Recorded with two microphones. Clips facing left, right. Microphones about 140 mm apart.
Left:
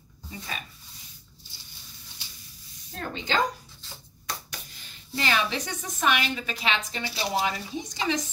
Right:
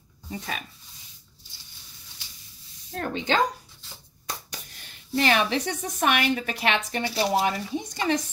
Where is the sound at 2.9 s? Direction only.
60° right (ahead or behind).